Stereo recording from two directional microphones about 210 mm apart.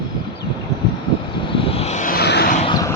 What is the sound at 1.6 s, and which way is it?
Vehicle, 30° left (ahead or behind).